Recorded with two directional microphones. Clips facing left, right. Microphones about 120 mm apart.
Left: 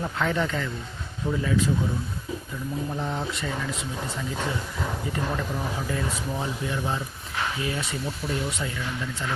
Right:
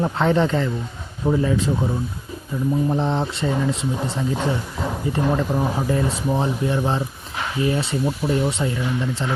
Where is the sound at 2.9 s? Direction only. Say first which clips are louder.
Right 8 dB; 30° right (ahead or behind).